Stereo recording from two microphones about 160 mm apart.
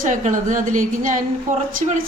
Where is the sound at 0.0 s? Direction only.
50° right (ahead or behind).